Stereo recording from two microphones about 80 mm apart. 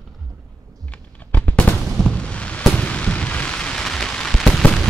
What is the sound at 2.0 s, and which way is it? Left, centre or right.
Fireworks, centre.